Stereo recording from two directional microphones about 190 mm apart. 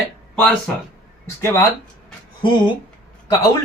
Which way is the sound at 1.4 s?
15° left (ahead or behind).